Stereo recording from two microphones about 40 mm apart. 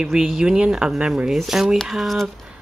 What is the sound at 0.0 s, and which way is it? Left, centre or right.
Speech, centre.